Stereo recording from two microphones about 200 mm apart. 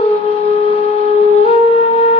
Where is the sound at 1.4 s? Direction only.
30° left (ahead or behind).